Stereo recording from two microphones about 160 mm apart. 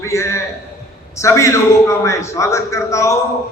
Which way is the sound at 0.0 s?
20° left (ahead or behind).